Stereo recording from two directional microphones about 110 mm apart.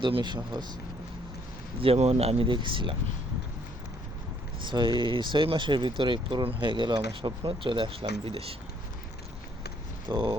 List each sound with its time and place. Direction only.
0.0 s speech: 45° right (ahead or behind)
1.8 s a man's voice: 65° right (ahead or behind)
2.5 s speech: 45° right (ahead or behind)
4.6 s speech: 45° right (ahead or behind)
10.1 s speech: 50° right (ahead or behind)